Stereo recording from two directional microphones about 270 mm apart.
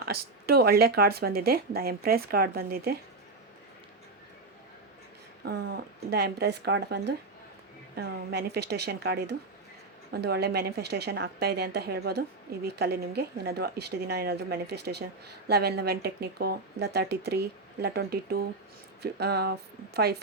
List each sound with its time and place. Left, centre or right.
0.4 s speech: right
5.5 s speech: right